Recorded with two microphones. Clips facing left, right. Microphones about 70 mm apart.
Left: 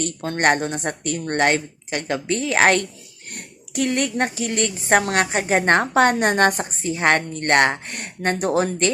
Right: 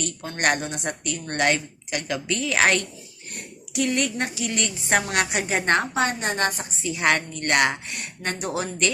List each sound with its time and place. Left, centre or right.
0.0 s a woman's voice: left